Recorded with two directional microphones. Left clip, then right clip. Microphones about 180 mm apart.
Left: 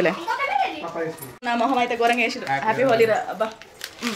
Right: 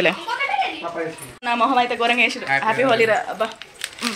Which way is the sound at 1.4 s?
Centre (ahead or behind).